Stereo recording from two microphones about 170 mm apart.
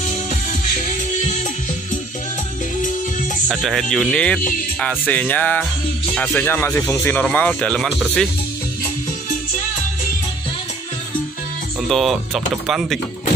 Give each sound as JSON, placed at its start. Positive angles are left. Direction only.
{"t": 0.5, "sound": "music", "side_deg": 50}
{"t": 3.4, "sound": "speech", "side_deg": 0}
{"t": 11.9, "sound": "speech", "side_deg": 0}